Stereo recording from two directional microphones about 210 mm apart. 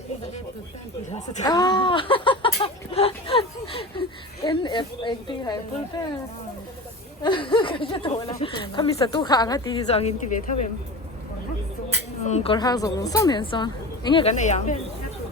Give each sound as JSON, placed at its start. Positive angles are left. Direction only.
{"t": 1.1, "sound": "speech", "side_deg": 35}
{"t": 1.5, "sound": "a sound", "side_deg": 20}
{"t": 7.2, "sound": "a woman's voice", "side_deg": 25}
{"t": 12.2, "sound": "a woman's voice", "side_deg": 30}